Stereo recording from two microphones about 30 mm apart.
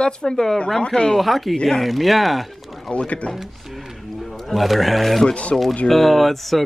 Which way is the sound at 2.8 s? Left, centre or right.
Left.